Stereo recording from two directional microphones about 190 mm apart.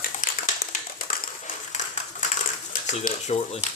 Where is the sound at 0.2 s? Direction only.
45° left (ahead or behind).